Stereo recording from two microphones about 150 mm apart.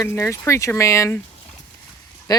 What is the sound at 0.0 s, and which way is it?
Speech, 20° left (ahead or behind).